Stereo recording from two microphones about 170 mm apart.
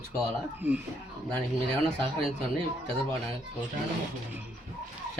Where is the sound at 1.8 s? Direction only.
5° left (ahead or behind).